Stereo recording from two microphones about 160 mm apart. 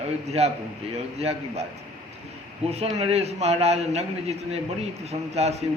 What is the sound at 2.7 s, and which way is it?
A man's voice, 40° right (ahead or behind).